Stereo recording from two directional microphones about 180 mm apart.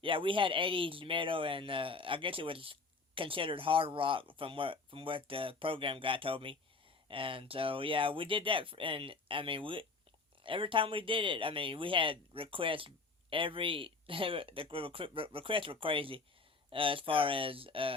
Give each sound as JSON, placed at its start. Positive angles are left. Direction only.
{"t": 0.0, "sound": "speech", "side_deg": -30}